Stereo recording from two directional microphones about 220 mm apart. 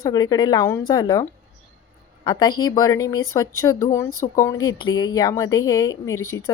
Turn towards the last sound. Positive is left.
turn(degrees=15)  # may be behind; listen again after turning